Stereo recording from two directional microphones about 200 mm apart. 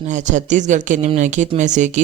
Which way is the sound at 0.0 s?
35° right (ahead or behind).